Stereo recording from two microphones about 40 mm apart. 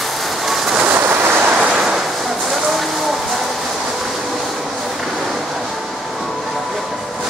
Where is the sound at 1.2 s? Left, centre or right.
Right.